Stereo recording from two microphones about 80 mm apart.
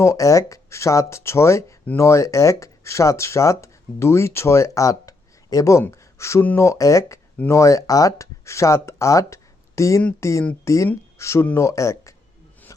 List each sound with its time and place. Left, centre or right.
0.0 s speech: left
5.9 s a sound: left
6.6 s speech: left